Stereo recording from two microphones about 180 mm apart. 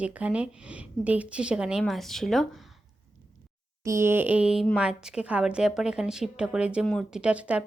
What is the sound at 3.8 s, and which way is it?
A woman's voice, 15° right (ahead or behind).